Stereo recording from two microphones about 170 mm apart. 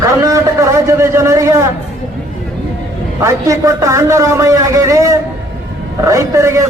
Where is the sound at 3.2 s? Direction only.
20° right (ahead or behind).